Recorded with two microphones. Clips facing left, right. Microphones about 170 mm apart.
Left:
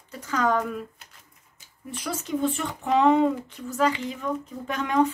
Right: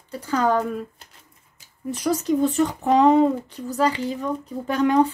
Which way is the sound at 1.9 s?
40° right (ahead or behind).